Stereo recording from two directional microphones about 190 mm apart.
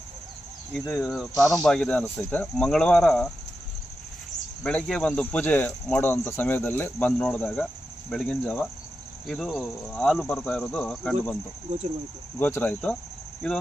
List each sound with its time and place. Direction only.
0.7 s speech: centre (ahead or behind)
4.6 s speech: 5° left (ahead or behind)
12.4 s speech: 10° left (ahead or behind)